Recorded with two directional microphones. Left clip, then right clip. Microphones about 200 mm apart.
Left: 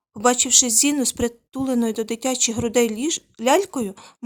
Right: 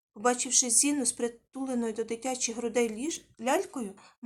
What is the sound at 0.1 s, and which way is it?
Speech, 40° left (ahead or behind).